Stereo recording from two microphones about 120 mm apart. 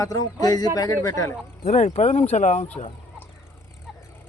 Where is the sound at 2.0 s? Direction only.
80° left.